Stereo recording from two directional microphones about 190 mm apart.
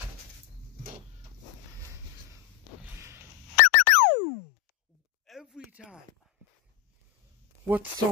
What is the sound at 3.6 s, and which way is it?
Chirp tone, 50° left (ahead or behind).